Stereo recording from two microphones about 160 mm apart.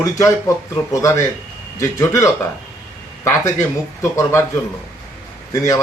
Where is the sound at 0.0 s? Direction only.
20° left (ahead or behind).